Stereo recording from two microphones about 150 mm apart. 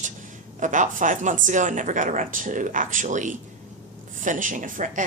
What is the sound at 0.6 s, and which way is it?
A woman's voice, 60° right (ahead or behind).